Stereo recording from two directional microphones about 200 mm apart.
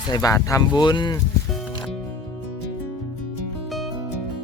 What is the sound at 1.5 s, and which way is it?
Music, centre (ahead or behind).